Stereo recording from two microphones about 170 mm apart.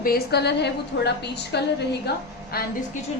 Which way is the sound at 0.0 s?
70° left (ahead or behind).